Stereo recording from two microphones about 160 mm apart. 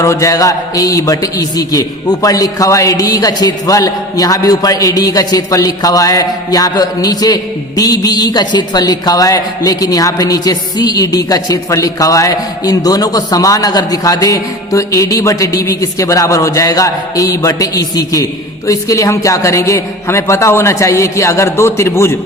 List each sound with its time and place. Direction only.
0.0 s a man's voice: 20° left (ahead or behind)